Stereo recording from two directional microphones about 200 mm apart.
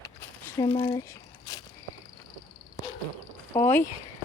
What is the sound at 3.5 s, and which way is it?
Speech, 10° left (ahead or behind).